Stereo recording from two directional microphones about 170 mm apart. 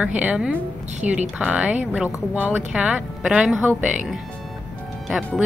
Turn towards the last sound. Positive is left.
turn(degrees=0)  # may be behind; listen again after turning